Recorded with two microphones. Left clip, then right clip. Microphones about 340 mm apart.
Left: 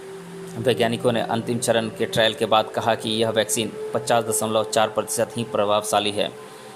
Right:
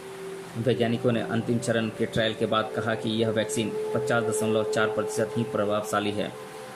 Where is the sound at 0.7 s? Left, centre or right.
Centre.